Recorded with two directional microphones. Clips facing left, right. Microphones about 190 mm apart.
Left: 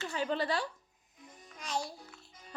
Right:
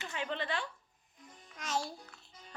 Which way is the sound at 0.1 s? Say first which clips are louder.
Left 4 dB; 40° left (ahead or behind).